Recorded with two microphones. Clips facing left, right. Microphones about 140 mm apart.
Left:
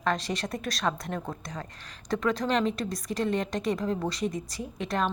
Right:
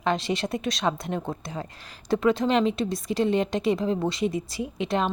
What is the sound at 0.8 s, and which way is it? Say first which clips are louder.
A woman's voice: right 3 dB; 25° right (ahead or behind).